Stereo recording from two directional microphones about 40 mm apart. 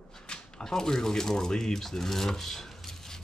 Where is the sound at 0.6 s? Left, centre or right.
Centre.